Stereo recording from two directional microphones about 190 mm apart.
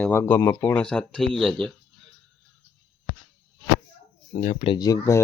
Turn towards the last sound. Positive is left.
turn(degrees=15)  # may be behind; listen again after turning